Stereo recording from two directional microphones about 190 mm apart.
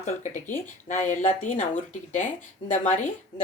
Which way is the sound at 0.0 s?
40° left (ahead or behind).